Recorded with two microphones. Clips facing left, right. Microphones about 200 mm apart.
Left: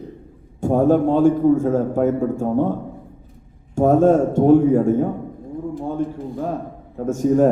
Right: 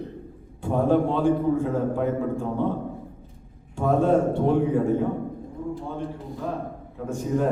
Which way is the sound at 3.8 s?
45° left (ahead or behind).